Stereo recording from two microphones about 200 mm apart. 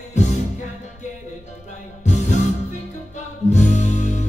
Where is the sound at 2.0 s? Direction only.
35° left (ahead or behind).